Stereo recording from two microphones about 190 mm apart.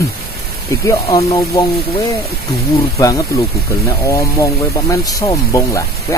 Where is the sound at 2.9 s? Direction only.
15° left (ahead or behind).